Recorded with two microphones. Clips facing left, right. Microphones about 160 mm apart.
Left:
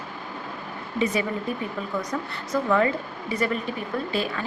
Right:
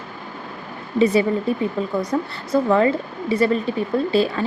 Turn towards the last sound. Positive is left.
turn(degrees=-30)  # may be behind; listen again after turning